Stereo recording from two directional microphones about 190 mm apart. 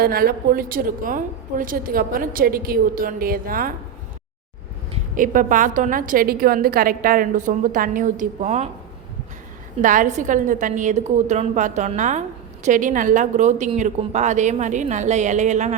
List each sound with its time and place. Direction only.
0.0 s a woman's voice: 50° right (ahead or behind)
5.1 s a woman's voice: 45° right (ahead or behind)
9.8 s a woman's voice: 45° right (ahead or behind)